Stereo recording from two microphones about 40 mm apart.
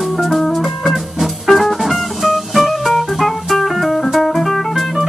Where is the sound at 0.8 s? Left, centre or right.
Centre.